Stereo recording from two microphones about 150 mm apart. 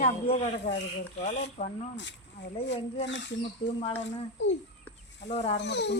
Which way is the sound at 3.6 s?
35° left (ahead or behind).